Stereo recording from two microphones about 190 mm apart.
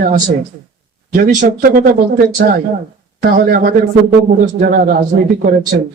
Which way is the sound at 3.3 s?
50° right (ahead or behind).